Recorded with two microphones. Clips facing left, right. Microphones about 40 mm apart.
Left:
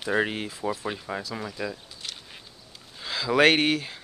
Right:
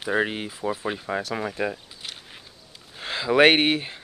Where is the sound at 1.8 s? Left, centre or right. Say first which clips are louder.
Right 1 dB; centre.